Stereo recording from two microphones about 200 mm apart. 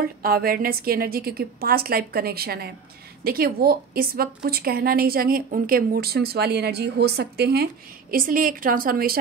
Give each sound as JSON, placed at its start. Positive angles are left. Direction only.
{"t": 0.2, "sound": "a woman's voice", "side_deg": -45}